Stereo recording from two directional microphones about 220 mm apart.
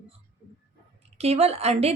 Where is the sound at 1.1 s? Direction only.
30° right (ahead or behind).